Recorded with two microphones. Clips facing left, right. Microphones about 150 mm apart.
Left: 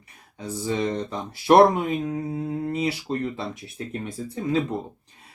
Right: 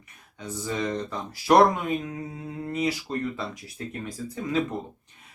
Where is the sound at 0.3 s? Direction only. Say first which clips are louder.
Left 4 dB; 30° left (ahead or behind).